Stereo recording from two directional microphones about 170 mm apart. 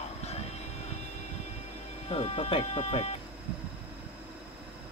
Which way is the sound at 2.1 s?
35° left (ahead or behind).